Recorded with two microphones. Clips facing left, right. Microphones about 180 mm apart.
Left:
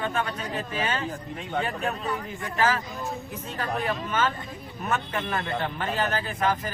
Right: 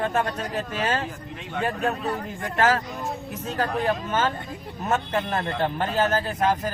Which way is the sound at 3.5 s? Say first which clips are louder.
Right 4 dB; 40° right (ahead or behind).